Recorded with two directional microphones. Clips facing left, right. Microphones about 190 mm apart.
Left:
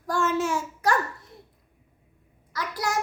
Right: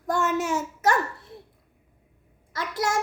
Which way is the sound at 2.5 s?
25° right (ahead or behind).